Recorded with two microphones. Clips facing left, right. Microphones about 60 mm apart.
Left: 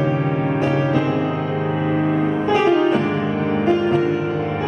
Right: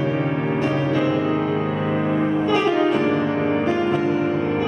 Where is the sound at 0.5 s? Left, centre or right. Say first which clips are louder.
Left 2 dB; centre.